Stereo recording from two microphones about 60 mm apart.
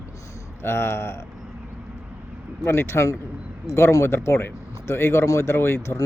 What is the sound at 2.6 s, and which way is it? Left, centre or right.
Speech, left.